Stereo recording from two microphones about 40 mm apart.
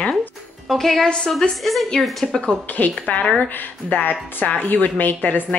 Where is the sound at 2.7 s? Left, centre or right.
Left.